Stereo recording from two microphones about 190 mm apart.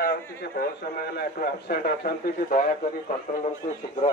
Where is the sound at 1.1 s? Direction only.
50° left (ahead or behind).